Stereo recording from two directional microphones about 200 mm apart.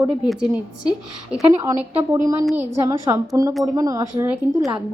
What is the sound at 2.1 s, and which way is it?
A woman's voice, 15° right (ahead or behind).